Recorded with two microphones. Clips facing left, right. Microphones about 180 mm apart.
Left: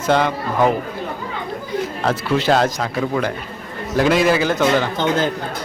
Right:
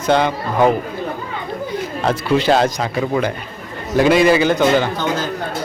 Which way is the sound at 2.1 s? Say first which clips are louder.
Right 2 dB; centre (ahead or behind).